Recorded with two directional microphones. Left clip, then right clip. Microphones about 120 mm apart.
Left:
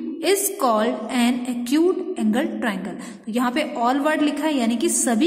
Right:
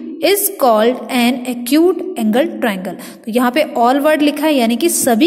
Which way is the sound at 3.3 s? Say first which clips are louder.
Right 9 dB; 40° right (ahead or behind).